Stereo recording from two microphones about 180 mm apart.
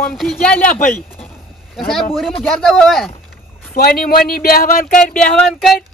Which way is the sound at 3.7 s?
55° left (ahead or behind).